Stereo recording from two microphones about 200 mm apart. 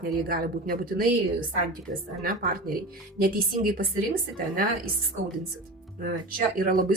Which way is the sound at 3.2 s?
45° right (ahead or behind).